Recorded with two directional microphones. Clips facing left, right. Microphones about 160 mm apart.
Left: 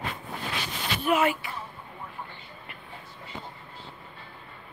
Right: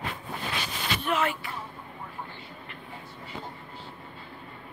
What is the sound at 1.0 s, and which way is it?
Speech, 10° left (ahead or behind).